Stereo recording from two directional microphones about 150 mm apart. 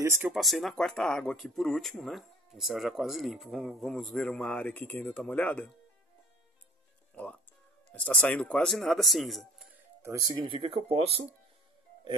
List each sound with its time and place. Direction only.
0.0 s speech: 15° right (ahead or behind)
0.3 s speech: centre (ahead or behind)
7.9 s speech: 5° left (ahead or behind)
10.0 s speech: 25° right (ahead or behind); by 11.2 s 40° right (ahead or behind)